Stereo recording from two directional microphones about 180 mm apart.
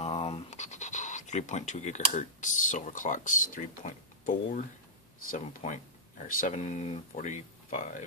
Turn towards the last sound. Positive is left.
turn(degrees=45)  # may be behind; listen again after turning